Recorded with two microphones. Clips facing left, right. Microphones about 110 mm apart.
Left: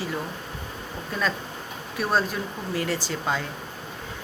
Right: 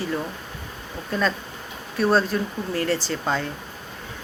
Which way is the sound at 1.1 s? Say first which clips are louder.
Right 4 dB; 10° left (ahead or behind).